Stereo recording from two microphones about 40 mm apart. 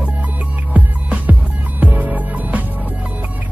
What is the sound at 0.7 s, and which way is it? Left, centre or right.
Music, right.